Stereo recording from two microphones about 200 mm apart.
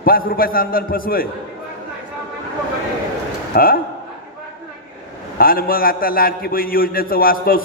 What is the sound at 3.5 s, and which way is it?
Speech, 45° left (ahead or behind).